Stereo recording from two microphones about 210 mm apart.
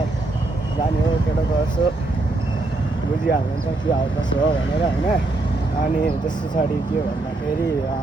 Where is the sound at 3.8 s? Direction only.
20° left (ahead or behind).